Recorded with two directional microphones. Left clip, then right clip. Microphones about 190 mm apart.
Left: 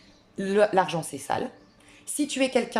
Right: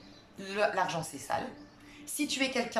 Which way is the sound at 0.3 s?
45° left (ahead or behind).